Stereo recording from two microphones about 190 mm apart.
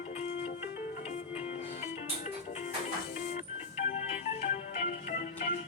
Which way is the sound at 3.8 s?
35° left (ahead or behind).